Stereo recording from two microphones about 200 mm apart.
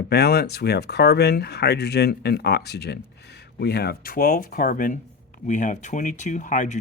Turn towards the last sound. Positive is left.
turn(degrees=40)  # may be behind; listen again after turning